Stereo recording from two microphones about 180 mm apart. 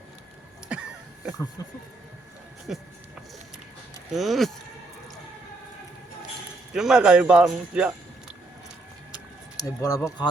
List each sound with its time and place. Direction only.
0.7 s a sound: 5° right (ahead or behind)
1.6 s speech: 20° left (ahead or behind)
4.1 s speech: centre (ahead or behind)
6.7 s speech: 5° right (ahead or behind)
9.6 s speech: 20° left (ahead or behind)